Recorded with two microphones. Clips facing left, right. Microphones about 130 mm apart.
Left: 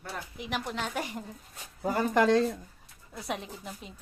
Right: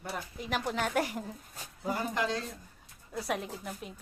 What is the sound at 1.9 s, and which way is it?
Speech, 55° left (ahead or behind).